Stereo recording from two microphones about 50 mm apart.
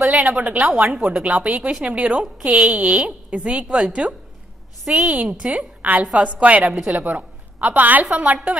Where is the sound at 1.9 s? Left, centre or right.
Right.